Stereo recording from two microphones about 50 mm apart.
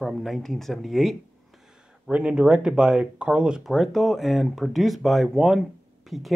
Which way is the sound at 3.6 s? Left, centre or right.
Centre.